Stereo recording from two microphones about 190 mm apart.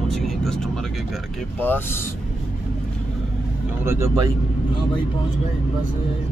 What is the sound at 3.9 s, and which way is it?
Speech, 15° right (ahead or behind).